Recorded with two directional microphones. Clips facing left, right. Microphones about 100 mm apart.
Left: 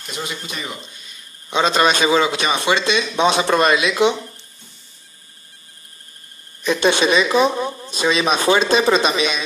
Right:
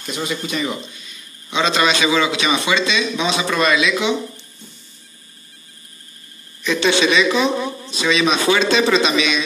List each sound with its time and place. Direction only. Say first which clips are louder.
0.2 s speech: right 5 dB; 5° left (ahead or behind)
1.5 s a man's voice: left 1 dB; 45° left (ahead or behind)
6.7 s a man's voice: left 1 dB; 45° left (ahead or behind)